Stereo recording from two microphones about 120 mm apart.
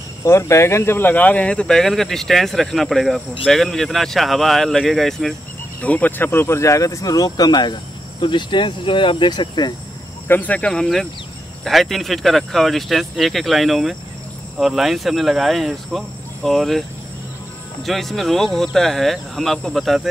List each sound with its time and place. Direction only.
0.2 s speech: 25° left (ahead or behind); by 5.3 s centre (ahead or behind)
5.8 s speech: 15° left (ahead or behind); by 9.8 s 35° left (ahead or behind)
10.2 s speech: 15° left (ahead or behind)
17.8 s speech: centre (ahead or behind)